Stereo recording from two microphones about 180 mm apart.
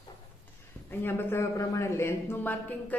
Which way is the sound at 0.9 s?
10° left (ahead or behind).